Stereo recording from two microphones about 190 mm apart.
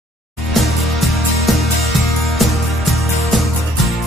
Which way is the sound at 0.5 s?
Centre (ahead or behind).